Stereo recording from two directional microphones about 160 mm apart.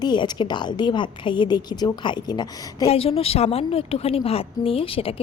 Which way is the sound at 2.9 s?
35° left (ahead or behind).